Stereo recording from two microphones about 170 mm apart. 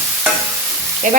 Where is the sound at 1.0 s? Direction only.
50° right (ahead or behind).